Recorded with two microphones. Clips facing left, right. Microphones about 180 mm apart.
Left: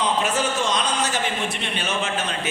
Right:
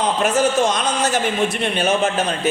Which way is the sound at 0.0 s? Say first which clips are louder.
Right 5 dB; 45° right (ahead or behind).